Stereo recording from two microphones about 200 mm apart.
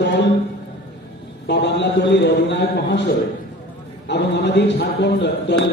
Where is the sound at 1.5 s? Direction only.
60° left (ahead or behind).